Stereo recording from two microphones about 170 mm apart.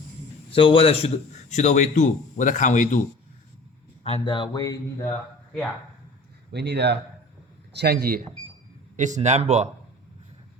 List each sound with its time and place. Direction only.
0.5 s a man's voice: 30° left (ahead or behind); by 3.0 s 45° left (ahead or behind)
4.0 s speech: 30° left (ahead or behind)
6.5 s speech: 80° right
7.8 s speech: 70° right (ahead or behind)
9.0 s speech: 45° right (ahead or behind)